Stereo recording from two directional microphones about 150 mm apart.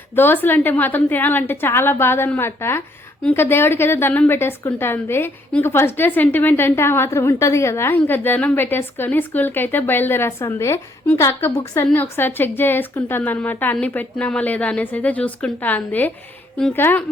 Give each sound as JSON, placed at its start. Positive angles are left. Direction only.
{"t": 0.2, "sound": "a woman's voice", "side_deg": 15}